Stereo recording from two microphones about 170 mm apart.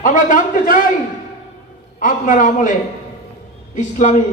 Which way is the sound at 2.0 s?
50° left (ahead or behind).